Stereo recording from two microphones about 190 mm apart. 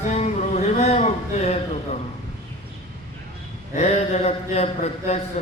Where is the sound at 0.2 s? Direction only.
35° left (ahead or behind).